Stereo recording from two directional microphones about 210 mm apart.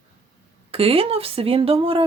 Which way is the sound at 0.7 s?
25° right (ahead or behind).